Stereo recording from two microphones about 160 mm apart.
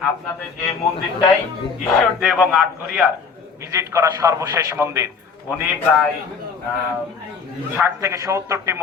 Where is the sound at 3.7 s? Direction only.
20° right (ahead or behind).